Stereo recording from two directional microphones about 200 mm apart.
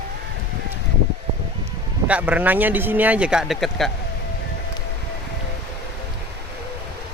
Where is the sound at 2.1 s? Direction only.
5° right (ahead or behind).